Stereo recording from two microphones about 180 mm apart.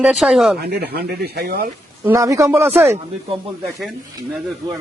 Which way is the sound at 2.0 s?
15° right (ahead or behind).